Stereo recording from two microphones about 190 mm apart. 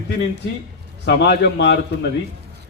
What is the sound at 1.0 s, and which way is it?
Speech, 60° left (ahead or behind).